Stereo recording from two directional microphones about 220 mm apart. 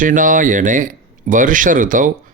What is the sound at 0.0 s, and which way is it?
Speech, 35° right (ahead or behind).